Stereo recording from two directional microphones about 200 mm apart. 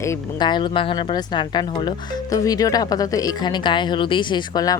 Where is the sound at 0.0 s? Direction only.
15° left (ahead or behind).